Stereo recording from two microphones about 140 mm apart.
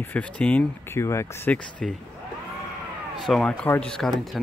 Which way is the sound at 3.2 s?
5° left (ahead or behind).